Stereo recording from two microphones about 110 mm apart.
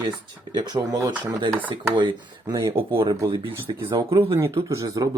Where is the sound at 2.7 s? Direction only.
55° right (ahead or behind).